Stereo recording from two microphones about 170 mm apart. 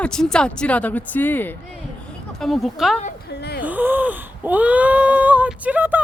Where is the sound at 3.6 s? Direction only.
10° right (ahead or behind).